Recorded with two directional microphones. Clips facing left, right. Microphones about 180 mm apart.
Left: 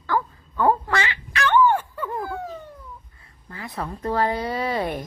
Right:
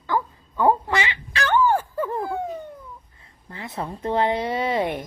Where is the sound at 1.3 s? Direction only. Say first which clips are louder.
Left 1 dB; 35° right (ahead or behind).